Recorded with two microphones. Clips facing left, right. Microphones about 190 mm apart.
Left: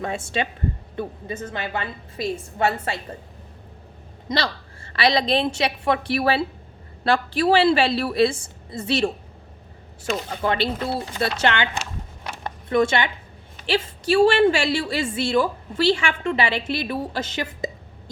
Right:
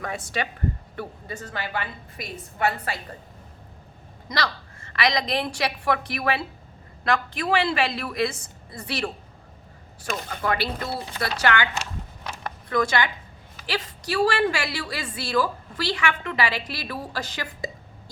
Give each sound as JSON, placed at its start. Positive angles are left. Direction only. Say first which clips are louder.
{"t": 0.0, "sound": "a woman's voice", "louder": "left 4 dB", "side_deg": 25}
{"t": 4.3, "sound": "a woman's voice", "louder": "left 3 dB", "side_deg": 30}
{"t": 10.2, "sound": "a woman's voice", "louder": "left 2 dB", "side_deg": 25}
{"t": 12.4, "sound": "a sound", "louder": "left 5 dB", "side_deg": 25}
{"t": 13.7, "sound": "a woman's voice", "louder": "left 8 dB", "side_deg": 25}